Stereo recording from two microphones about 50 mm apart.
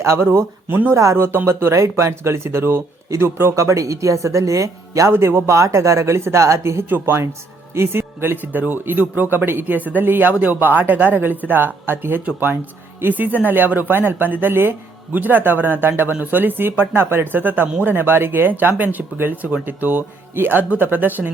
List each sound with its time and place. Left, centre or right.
0.0 s speech: right
0.7 s a man's voice: right
0.9 s speech: right
5.1 s speech: right
5.5 s speech: right
6.8 s a man's voice: right
17.3 s a man's voice: right